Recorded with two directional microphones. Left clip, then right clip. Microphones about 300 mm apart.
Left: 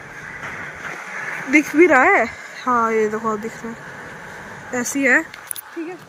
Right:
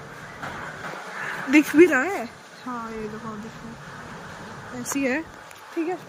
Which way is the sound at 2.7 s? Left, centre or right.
Left.